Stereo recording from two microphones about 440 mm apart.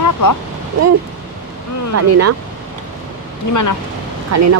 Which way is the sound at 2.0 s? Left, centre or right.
Right.